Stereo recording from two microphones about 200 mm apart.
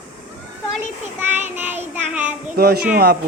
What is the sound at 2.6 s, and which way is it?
Speech, 50° right (ahead or behind).